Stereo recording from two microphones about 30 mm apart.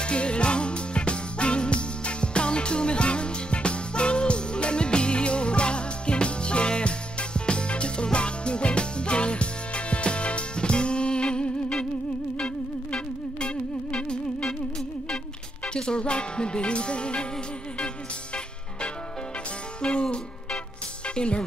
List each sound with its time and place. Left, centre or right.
0.0 s music: left
15.6 s music: left
19.8 s music: left